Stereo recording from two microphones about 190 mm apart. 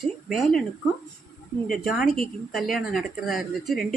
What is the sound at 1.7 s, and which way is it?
Speech, centre (ahead or behind).